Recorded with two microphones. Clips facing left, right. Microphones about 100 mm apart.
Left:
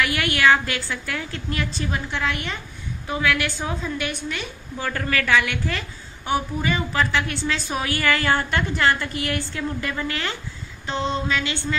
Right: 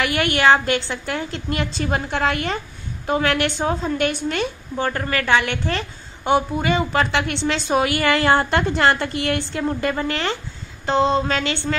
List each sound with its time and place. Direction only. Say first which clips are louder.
0.0 s a woman's voice: right 2 dB; 35° right (ahead or behind)
2.0 s a woman's voice: right 5 dB; 40° right (ahead or behind)